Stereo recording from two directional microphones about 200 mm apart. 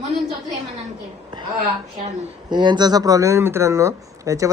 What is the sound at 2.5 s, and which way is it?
Speech, 20° right (ahead or behind).